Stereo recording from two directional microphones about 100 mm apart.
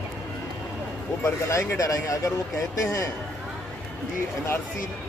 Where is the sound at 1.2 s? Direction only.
30° left (ahead or behind).